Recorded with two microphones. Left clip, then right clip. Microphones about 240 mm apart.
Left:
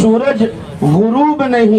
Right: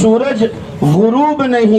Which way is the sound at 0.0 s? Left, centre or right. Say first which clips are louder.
Even; right.